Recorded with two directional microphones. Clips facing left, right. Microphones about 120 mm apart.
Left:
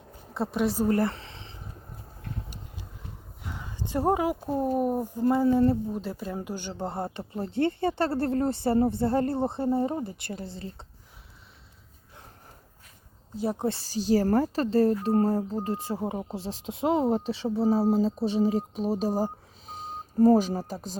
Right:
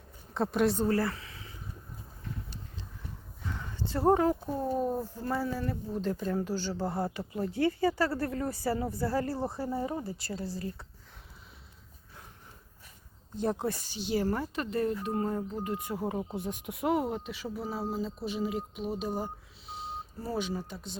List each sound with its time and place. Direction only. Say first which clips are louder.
0.3 s speech: left 1 dB; centre (ahead or behind)
0.9 s a sound: left 4 dB; 25° left (ahead or behind)
3.4 s a sound: even; 15° left (ahead or behind)
4.4 s speech: left 5 dB; 20° left (ahead or behind)
5.9 s speech: right 1 dB; 10° left (ahead or behind); by 10.8 s 25° left (ahead or behind)
13.3 s speech: left 1 dB; 5° left (ahead or behind)
13.6 s speech: left 5 dB; 30° left (ahead or behind)
17.1 s speech: left 9 dB; 35° left (ahead or behind)